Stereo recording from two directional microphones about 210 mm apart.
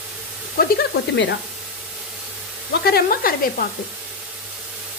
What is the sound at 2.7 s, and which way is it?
Speech, 45° left (ahead or behind).